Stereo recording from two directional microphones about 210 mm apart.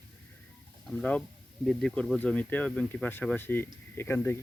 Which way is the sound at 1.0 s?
5° left (ahead or behind).